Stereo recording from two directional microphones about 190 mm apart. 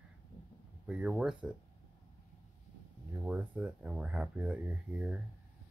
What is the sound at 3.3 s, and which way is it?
Speech, 5° right (ahead or behind).